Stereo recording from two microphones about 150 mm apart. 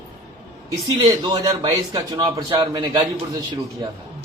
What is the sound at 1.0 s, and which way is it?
A man's voice, 30° right (ahead or behind).